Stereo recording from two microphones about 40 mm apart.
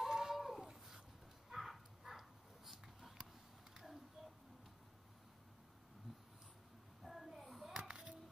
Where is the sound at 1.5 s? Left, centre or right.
Centre.